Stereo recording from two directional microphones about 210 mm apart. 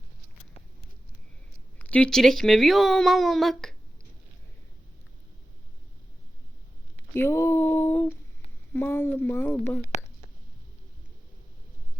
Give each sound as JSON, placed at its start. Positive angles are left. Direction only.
{"t": 1.8, "sound": "speech", "side_deg": 5}
{"t": 7.1, "sound": "female singing", "side_deg": 10}
{"t": 9.9, "sound": "whispering", "side_deg": 35}